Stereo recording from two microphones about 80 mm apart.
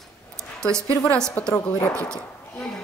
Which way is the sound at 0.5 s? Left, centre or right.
Centre.